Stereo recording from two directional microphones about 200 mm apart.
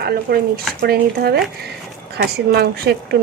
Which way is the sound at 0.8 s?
50° right (ahead or behind).